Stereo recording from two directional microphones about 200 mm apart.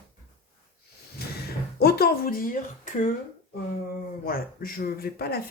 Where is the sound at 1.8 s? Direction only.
50° left (ahead or behind).